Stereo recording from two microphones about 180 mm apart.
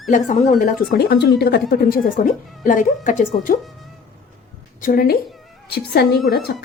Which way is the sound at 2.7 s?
45° left (ahead or behind).